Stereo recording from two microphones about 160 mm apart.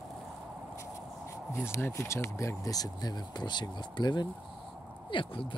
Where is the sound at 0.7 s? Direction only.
20° left (ahead or behind).